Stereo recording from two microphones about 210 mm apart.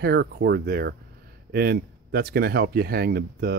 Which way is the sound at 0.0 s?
50° right (ahead or behind).